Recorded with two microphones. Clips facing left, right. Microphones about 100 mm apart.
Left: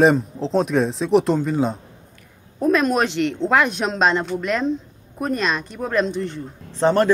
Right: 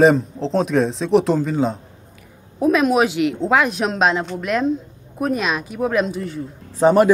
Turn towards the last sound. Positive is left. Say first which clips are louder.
# right 4 dB
turn(degrees=-10)  # may be behind; listen again after turning